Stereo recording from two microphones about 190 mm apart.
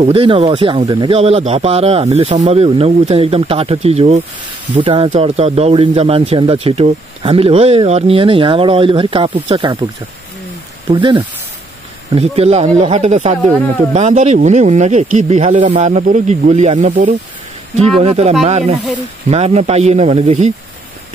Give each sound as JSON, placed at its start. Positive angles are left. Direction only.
{"t": 0.0, "sound": "speech", "side_deg": -30}
{"t": 10.9, "sound": "speech", "side_deg": -25}